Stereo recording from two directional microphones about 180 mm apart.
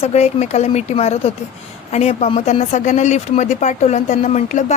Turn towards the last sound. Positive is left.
turn(degrees=40)  # may be behind; listen again after turning